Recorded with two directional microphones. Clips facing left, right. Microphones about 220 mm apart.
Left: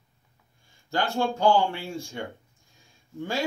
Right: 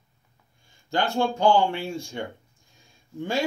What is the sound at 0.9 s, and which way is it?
Speech, 20° right (ahead or behind).